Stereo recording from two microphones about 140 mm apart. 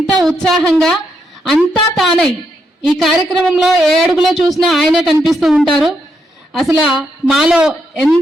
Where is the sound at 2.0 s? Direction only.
5° left (ahead or behind).